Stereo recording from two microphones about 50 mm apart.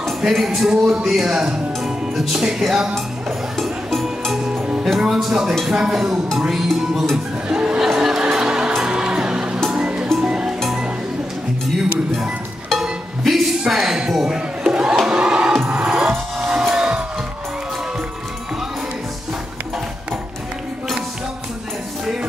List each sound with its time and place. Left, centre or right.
0.2 s speech: centre
0.7 s speech: centre
3.5 s music: centre
5.0 s speech: centre
6.3 s music: centre
7.4 s music: centre
13.2 s a sound: centre
15.0 s crowd: centre
15.7 s music: centre